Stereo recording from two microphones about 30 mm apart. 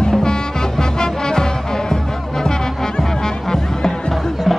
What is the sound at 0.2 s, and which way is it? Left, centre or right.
Music, left.